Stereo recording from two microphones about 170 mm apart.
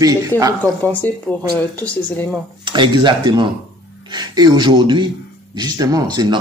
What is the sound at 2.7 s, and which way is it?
Speech, 30° right (ahead or behind).